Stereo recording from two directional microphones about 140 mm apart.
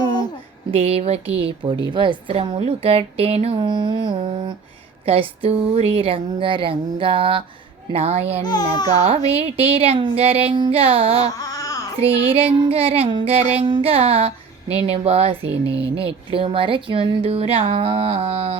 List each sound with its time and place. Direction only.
0.7 s speech: 45° right (ahead or behind)
8.4 s speech: 30° left (ahead or behind)
8.9 s speech: 45° right (ahead or behind)
11.3 s baby cry: 25° left (ahead or behind)
12.2 s speech: 40° right (ahead or behind)
13.7 s a sound: 35° right (ahead or behind)
14.8 s speech: 45° right (ahead or behind)